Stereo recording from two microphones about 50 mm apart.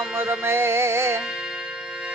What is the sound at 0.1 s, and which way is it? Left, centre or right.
Music, right.